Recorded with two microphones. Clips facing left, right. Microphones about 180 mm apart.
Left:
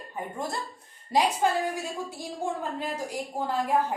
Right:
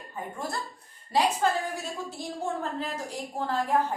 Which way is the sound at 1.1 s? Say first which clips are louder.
Left 1 dB; 15° left (ahead or behind).